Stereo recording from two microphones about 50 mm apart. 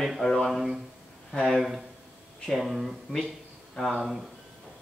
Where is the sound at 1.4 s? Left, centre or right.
Centre.